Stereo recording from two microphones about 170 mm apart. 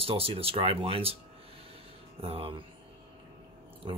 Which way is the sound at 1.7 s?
35° right (ahead or behind).